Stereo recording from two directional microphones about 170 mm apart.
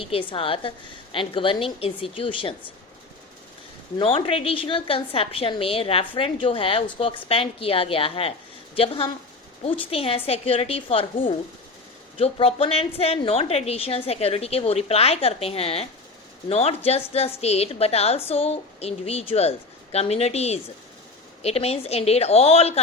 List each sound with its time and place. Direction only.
0.0 s a woman's voice: 30° left (ahead or behind)
3.9 s a woman's voice: 35° left (ahead or behind)